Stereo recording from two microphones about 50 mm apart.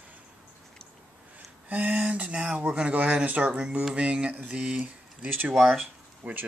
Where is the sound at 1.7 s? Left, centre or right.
Right.